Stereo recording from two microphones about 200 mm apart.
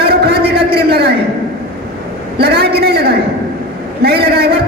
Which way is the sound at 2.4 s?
50° right (ahead or behind).